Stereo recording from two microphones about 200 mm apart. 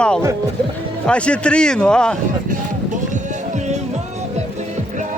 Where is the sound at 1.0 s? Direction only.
5° left (ahead or behind).